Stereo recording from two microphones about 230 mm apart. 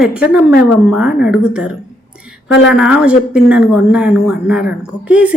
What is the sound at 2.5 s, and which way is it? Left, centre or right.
Speech, left.